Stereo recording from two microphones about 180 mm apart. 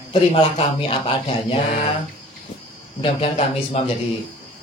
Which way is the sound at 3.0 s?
35° left (ahead or behind).